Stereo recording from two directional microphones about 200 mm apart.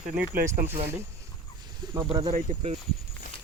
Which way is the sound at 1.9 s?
30° right (ahead or behind).